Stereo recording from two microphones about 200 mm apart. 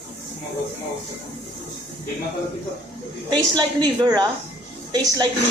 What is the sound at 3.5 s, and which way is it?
Speech, 20° right (ahead or behind).